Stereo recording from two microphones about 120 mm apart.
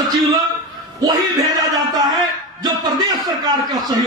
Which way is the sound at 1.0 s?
35° right (ahead or behind).